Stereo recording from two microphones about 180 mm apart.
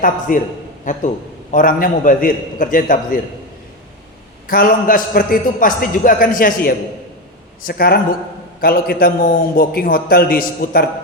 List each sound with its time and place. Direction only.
0.0 s a man's voice: 50° left (ahead or behind)
4.4 s a man's voice: 50° left (ahead or behind)